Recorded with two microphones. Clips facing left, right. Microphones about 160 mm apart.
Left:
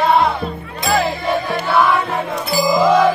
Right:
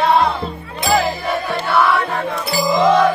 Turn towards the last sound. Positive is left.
turn(degrees=5)  # may be behind; listen again after turning